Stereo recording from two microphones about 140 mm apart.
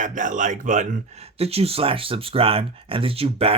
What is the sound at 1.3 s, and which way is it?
Speech, 45° right (ahead or behind).